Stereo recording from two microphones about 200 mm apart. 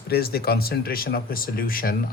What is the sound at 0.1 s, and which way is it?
Speech, 50° left (ahead or behind).